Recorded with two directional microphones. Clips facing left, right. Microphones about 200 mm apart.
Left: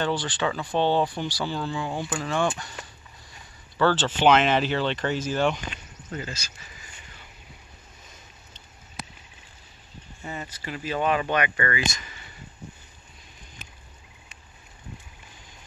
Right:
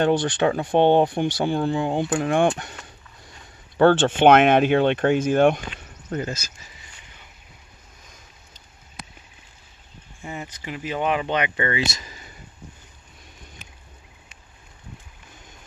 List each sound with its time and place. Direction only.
0.0 s speech: 50° right (ahead or behind)
3.7 s speech: 55° right (ahead or behind)
6.0 s speech: 45° right (ahead or behind)
10.2 s speech: 10° right (ahead or behind); by 12.3 s 35° right (ahead or behind)